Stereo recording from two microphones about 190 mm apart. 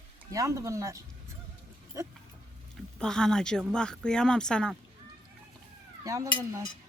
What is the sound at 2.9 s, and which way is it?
Speech, 5° left (ahead or behind).